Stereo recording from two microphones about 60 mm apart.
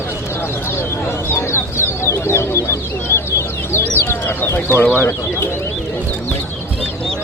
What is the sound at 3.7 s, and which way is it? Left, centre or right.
Bird, left.